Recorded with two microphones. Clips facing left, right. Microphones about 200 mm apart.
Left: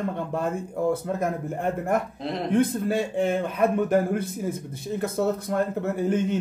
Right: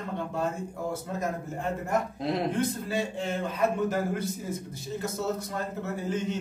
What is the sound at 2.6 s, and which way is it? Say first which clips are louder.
A man's voice: left 6 dB; 55° left (ahead or behind).